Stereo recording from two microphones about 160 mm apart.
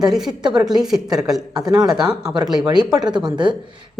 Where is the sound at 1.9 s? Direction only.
5° right (ahead or behind).